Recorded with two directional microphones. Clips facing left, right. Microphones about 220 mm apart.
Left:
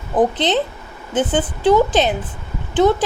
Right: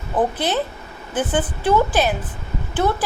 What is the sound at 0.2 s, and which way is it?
A woman's voice, 20° left (ahead or behind).